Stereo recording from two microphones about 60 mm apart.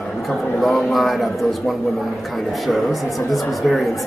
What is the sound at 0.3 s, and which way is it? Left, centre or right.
A man's voice, centre.